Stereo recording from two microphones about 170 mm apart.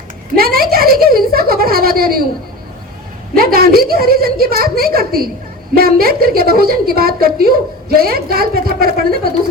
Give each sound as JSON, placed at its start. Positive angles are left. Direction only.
{"t": 0.3, "sound": "a woman's voice", "side_deg": -60}
{"t": 3.3, "sound": "a woman's voice", "side_deg": -60}